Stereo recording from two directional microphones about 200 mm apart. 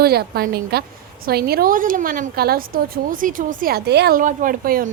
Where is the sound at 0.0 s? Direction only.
50° right (ahead or behind).